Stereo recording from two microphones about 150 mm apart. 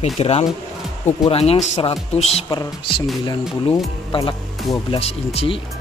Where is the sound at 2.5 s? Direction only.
30° left (ahead or behind).